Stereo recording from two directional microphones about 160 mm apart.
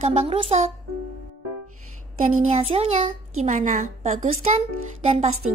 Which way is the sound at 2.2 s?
40° right (ahead or behind).